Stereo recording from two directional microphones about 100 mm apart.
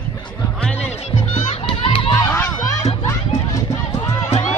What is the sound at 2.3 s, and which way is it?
Music, 30° left (ahead or behind).